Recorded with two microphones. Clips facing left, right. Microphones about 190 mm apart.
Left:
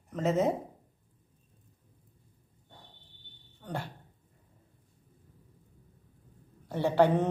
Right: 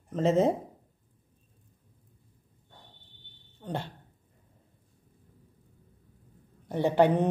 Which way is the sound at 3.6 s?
25° right (ahead or behind).